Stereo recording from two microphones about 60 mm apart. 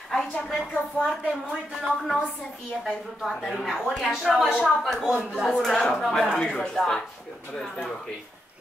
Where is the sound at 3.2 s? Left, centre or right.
Centre.